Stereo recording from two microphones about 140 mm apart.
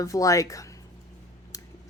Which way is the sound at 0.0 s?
25° left (ahead or behind).